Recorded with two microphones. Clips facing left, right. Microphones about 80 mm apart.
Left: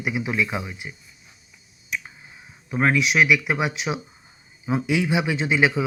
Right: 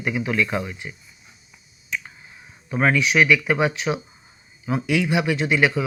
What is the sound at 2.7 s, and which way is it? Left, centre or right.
Speech, centre.